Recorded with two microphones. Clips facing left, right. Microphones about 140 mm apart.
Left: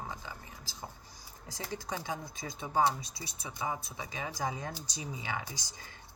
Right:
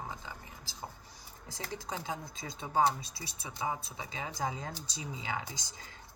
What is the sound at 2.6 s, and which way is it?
Speech, 25° right (ahead or behind).